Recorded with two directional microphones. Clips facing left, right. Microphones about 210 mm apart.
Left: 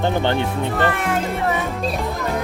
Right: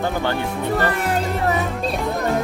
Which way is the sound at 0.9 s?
40° right (ahead or behind).